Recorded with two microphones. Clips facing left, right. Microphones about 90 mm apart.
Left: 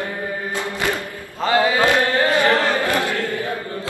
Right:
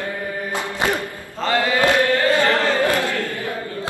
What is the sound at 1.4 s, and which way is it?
Chant, 20° left (ahead or behind).